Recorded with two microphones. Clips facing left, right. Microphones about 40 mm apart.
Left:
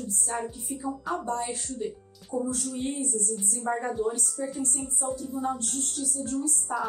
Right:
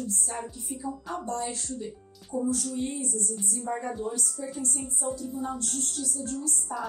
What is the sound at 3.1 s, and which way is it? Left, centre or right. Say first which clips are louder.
Music: left 2 dB; right.